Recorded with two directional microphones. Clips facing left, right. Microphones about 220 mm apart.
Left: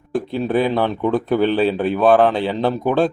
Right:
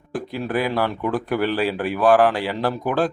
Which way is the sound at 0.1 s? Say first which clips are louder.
Left 5 dB; 25° left (ahead or behind).